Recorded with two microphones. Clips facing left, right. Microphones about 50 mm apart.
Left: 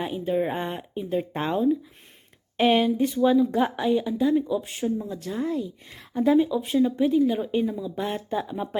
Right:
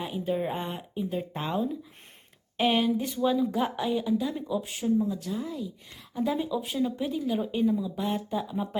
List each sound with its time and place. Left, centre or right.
0.0 s a woman's voice: centre
5.0 s speech: left
5.5 s a woman's voice: centre